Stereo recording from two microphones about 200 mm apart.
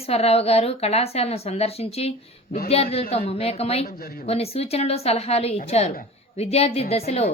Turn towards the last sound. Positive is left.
turn(degrees=30)  # may be behind; listen again after turning